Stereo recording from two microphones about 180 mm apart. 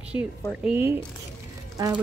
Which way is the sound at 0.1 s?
15° right (ahead or behind).